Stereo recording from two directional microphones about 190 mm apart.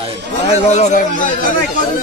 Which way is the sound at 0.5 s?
35° left (ahead or behind).